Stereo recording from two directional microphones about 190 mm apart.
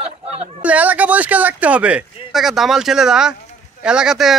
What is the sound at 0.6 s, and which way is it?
Speech, 10° right (ahead or behind).